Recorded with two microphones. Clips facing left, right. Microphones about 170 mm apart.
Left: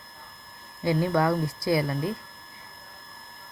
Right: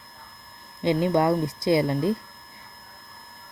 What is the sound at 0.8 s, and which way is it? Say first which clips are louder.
Speech: right 2 dB; 20° right (ahead or behind).